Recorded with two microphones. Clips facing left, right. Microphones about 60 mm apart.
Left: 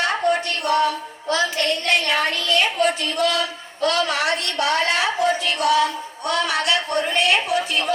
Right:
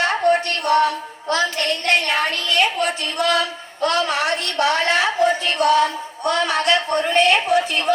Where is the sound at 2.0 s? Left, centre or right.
Right.